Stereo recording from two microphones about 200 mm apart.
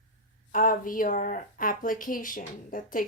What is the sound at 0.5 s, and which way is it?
A woman's voice, 40° left (ahead or behind).